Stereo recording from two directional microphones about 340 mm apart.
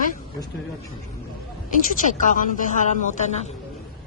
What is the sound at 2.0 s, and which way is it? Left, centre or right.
A woman's voice, left.